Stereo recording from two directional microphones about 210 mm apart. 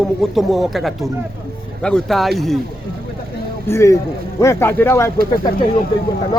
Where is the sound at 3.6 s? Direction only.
15° left (ahead or behind).